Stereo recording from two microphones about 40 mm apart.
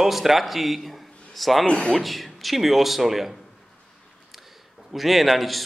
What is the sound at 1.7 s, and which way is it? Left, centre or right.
Speech, left.